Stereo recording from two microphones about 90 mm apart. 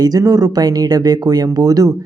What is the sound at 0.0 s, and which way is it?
Speech, 45° right (ahead or behind).